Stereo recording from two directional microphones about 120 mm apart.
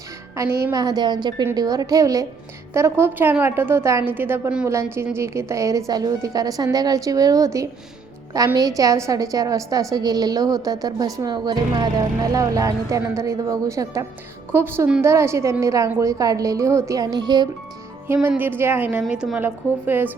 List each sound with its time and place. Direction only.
0.3 s a woman's voice: 30° right (ahead or behind)
18.1 s a woman's voice: 15° right (ahead or behind)